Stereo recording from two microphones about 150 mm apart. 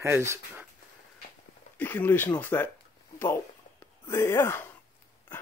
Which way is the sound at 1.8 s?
15° left (ahead or behind).